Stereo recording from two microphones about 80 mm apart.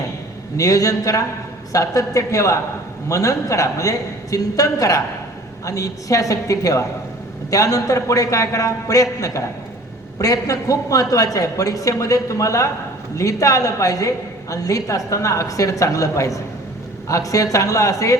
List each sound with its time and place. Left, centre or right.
0.5 s a man's voice: left